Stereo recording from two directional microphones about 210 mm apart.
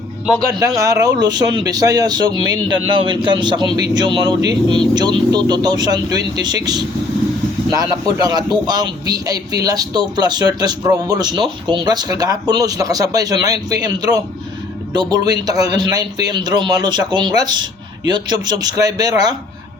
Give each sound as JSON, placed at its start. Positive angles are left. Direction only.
{"t": 0.6, "sound": "a man's voice", "side_deg": -15}